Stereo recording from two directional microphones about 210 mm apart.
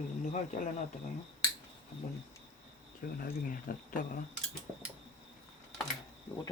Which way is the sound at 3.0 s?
45° left (ahead or behind).